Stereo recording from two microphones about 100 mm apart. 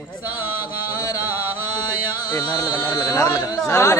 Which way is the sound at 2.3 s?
45° left (ahead or behind).